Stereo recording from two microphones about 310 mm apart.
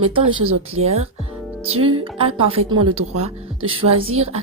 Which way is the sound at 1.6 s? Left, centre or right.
Centre.